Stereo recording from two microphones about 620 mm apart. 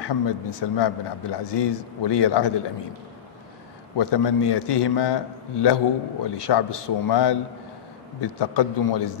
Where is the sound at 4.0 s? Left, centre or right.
Left.